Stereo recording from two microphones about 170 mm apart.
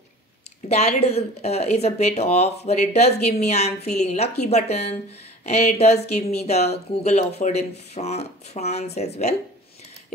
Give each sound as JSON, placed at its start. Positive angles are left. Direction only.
{"t": 0.7, "sound": "a woman's voice", "side_deg": 40}